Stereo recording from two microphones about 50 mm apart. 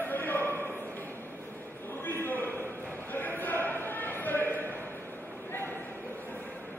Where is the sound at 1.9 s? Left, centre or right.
Left.